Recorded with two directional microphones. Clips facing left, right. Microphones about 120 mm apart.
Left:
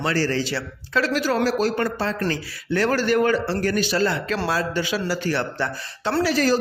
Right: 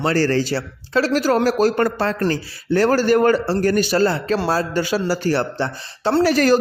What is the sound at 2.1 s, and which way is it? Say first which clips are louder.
A man's voice: right 4 dB; 35° right (ahead or behind).